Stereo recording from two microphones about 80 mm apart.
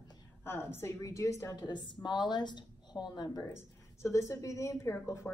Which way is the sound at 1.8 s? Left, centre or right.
Left.